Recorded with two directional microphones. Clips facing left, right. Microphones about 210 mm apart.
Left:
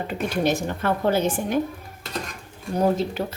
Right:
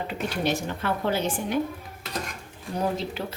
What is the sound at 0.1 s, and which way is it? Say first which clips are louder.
A woman's voice: left 5 dB; 45° left (ahead or behind).